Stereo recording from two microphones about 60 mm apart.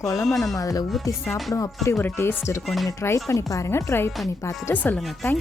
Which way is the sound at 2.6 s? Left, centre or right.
Centre.